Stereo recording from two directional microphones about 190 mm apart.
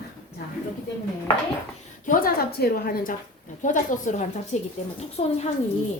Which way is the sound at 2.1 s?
50° left (ahead or behind).